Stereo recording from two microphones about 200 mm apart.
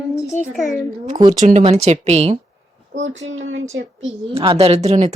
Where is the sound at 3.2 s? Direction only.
75° right (ahead or behind).